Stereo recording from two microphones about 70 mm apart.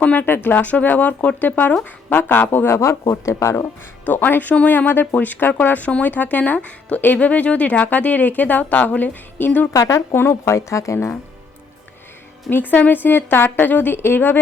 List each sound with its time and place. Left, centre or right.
0.0 s speech: left
4.0 s speech: left
9.7 s speech: left
10.2 s speech: left
12.5 s speech: left